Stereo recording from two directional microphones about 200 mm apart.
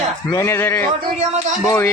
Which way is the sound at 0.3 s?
10° left (ahead or behind).